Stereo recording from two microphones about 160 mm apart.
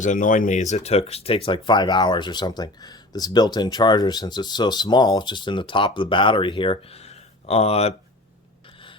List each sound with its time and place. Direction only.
0.0 s speech: 55° left (ahead or behind)